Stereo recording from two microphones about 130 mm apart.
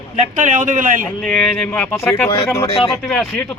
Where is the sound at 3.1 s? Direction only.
5° left (ahead or behind).